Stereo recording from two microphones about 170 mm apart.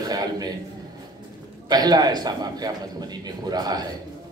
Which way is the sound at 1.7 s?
25° right (ahead or behind).